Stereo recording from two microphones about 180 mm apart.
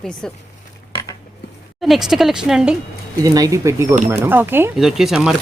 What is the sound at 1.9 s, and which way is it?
Speech, centre (ahead or behind).